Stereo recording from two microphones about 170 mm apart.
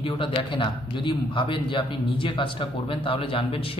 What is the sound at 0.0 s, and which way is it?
A man's voice, 30° left (ahead or behind).